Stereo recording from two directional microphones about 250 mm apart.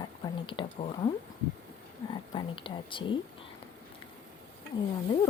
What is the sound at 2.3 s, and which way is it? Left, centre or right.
Speech, centre.